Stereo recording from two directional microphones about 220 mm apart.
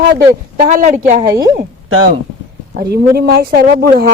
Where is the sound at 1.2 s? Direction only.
15° right (ahead or behind).